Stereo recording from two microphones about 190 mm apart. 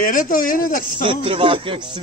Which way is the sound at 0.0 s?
45° left (ahead or behind).